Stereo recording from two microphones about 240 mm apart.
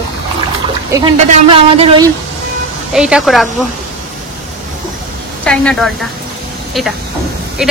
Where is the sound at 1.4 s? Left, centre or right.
Right.